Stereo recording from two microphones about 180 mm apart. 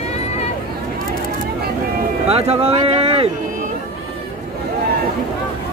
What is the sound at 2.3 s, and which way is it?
Speech, 35° right (ahead or behind).